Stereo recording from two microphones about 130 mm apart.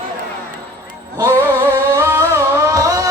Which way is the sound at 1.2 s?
20° right (ahead or behind).